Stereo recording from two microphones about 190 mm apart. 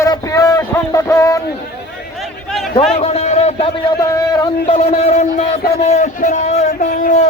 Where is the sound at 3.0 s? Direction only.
35° left (ahead or behind).